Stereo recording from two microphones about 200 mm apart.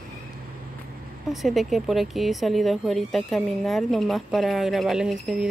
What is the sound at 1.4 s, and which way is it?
Speech, centre (ahead or behind).